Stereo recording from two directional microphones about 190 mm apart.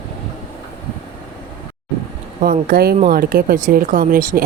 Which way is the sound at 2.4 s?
50° right (ahead or behind).